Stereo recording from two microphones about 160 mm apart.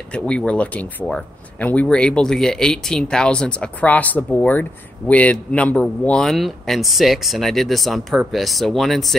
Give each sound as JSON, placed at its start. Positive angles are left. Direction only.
{"t": 0.1, "sound": "speech", "side_deg": 5}